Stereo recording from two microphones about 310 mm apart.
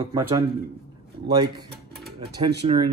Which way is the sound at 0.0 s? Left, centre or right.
Centre.